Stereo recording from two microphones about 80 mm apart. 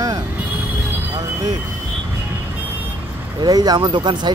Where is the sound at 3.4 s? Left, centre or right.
Right.